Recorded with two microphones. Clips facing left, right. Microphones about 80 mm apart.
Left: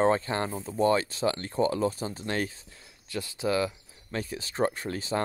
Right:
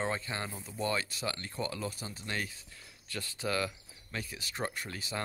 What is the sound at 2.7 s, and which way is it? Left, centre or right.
Speech, left.